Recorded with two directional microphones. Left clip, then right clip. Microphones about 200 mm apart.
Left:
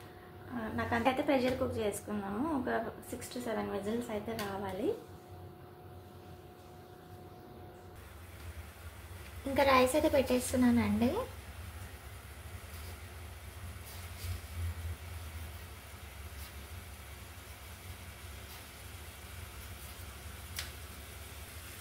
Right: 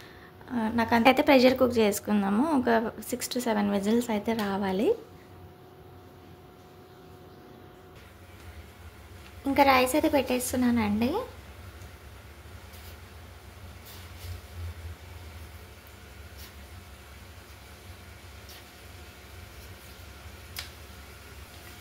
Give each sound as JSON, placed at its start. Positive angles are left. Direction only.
{"t": 0.6, "sound": "a woman's voice", "side_deg": -55}
{"t": 9.5, "sound": "a woman's voice", "side_deg": -15}